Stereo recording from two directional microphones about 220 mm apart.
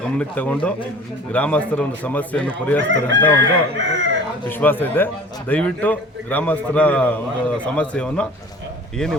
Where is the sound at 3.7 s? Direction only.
55° right (ahead or behind).